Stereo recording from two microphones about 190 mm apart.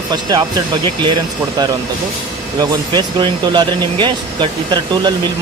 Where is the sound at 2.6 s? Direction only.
25° right (ahead or behind).